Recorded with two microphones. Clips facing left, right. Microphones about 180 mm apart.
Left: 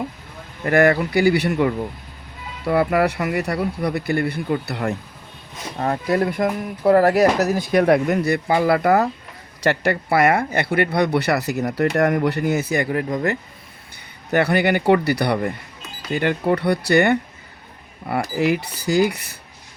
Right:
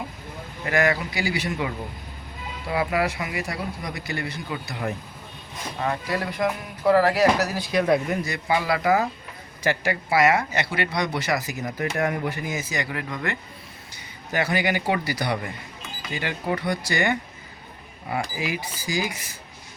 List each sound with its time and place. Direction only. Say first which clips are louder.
0.6 s speech: left 7 dB; 55° left (ahead or behind)
5.7 s speech: left 6 dB; 45° left (ahead or behind); by 12.9 s 60° left (ahead or behind)
12.9 s speech: left 8 dB; 40° left (ahead or behind)
14.3 s speech: left 6 dB; 60° left (ahead or behind)
18.3 s speech: left 9 dB; 60° left (ahead or behind)